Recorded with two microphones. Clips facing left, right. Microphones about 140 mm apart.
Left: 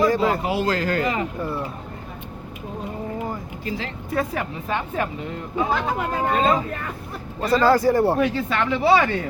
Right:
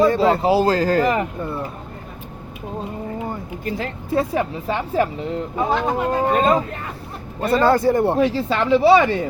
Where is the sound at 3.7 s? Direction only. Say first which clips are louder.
Right 3 dB; 50° right (ahead or behind).